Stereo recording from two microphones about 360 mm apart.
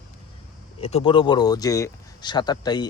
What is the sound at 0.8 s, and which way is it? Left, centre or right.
Speech, centre.